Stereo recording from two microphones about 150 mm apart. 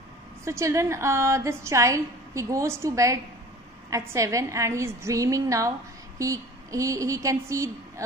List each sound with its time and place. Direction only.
0.5 s a woman's voice: 20° right (ahead or behind)